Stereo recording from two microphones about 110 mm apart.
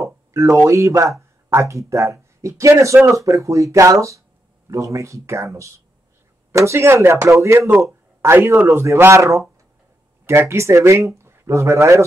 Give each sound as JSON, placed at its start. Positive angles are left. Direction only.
{"t": 0.0, "sound": "speech", "side_deg": -30}